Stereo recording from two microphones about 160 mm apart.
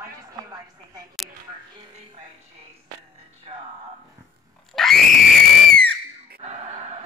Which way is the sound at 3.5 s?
40° right (ahead or behind).